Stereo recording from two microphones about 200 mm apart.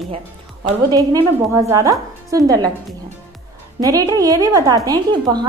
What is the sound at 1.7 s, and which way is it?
Speech, 15° right (ahead or behind).